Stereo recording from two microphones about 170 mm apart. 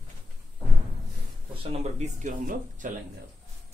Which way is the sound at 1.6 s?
40° right (ahead or behind).